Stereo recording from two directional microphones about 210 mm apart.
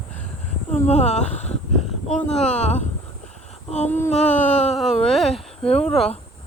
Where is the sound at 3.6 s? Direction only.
30° left (ahead or behind).